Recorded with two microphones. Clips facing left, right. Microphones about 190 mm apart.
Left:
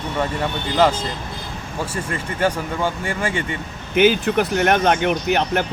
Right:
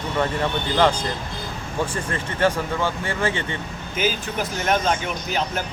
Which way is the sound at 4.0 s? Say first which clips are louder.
Left 9 dB; 65° left (ahead or behind).